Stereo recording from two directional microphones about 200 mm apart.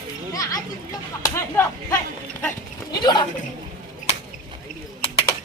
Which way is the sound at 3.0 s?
20° left (ahead or behind).